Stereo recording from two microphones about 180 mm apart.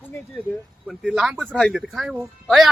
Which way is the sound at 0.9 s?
Centre (ahead or behind).